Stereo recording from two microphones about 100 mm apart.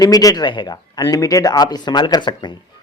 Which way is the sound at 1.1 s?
35° left (ahead or behind).